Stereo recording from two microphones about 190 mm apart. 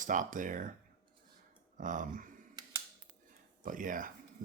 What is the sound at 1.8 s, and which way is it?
Speech, 45° right (ahead or behind).